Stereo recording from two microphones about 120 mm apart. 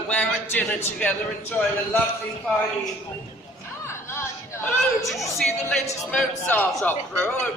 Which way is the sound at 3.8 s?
20° left (ahead or behind).